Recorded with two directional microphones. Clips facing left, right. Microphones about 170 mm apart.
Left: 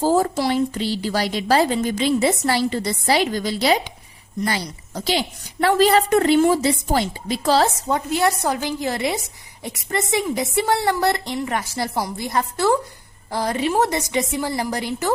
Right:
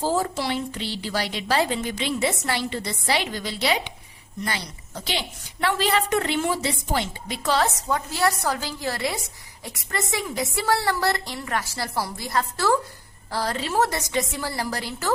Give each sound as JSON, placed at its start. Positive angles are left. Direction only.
{"t": 0.0, "sound": "a woman's voice", "side_deg": 45}